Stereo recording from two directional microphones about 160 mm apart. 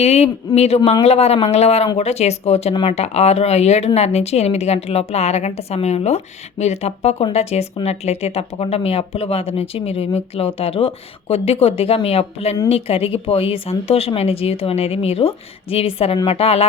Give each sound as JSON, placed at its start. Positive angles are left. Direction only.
{"t": 0.0, "sound": "speech", "side_deg": 40}